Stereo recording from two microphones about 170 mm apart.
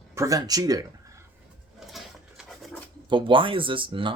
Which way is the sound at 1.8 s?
Centre (ahead or behind).